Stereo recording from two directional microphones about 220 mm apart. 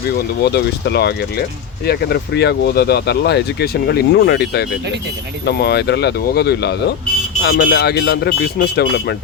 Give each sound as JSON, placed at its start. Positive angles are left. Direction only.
{"t": 0.4, "sound": "speech", "side_deg": 50}